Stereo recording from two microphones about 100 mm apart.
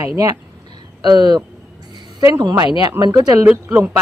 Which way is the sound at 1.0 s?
45° right (ahead or behind).